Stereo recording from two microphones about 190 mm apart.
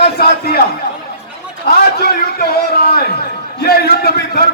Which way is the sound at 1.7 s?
55° left (ahead or behind).